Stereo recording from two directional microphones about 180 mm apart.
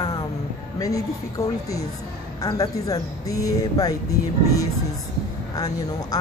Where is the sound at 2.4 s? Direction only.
20° left (ahead or behind).